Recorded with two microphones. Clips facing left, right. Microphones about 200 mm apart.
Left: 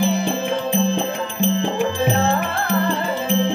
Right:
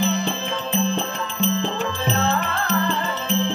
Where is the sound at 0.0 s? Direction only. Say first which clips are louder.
Left 3 dB; 10° left (ahead or behind).